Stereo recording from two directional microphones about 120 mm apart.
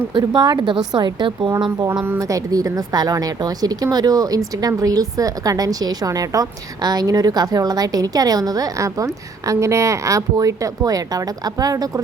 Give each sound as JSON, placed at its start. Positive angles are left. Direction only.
{"t": 0.1, "sound": "a woman's voice", "side_deg": -35}